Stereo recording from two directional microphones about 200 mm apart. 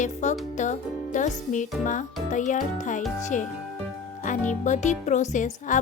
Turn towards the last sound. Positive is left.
turn(degrees=40)  # may be behind; listen again after turning